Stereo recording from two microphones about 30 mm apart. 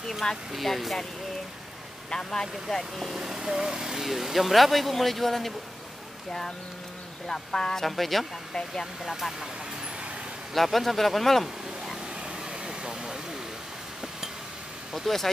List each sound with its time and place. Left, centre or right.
0.2 s speech: centre
0.7 s speech: centre
2.0 s speech: left
3.2 s speech: centre
7.2 s speech: left
7.8 s speech: centre
10.5 s speech: centre
12.6 s vehicle: right
15.1 s speech: centre